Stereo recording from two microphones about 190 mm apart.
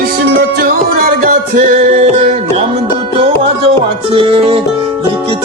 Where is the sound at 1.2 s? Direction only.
40° right (ahead or behind).